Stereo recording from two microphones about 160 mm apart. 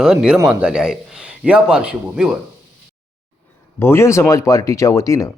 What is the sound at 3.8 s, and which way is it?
Speech, 15° left (ahead or behind).